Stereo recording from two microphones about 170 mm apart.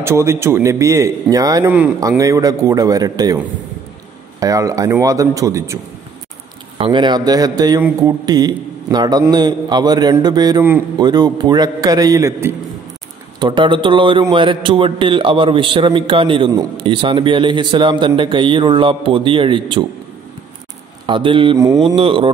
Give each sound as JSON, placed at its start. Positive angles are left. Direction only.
{"t": 0.0, "sound": "a man's voice", "side_deg": -15}
{"t": 4.4, "sound": "a man's voice", "side_deg": -20}
{"t": 6.8, "sound": "a man's voice", "side_deg": -30}
{"t": 13.4, "sound": "a man's voice", "side_deg": -30}
{"t": 21.1, "sound": "a man's voice", "side_deg": -30}
{"t": 21.8, "sound": "mantra", "side_deg": -35}